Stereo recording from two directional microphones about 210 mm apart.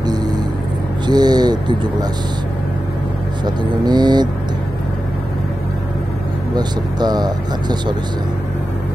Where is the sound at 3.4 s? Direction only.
20° right (ahead or behind).